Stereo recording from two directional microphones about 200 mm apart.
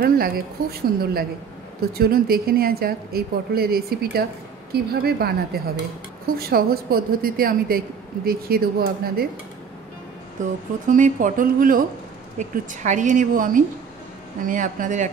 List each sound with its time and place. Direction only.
0.0 s a woman's voice: 50° right (ahead or behind)
10.4 s a woman's voice: 40° right (ahead or behind)